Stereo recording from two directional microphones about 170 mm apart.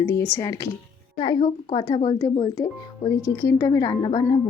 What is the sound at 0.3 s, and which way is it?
Speech, 20° left (ahead or behind).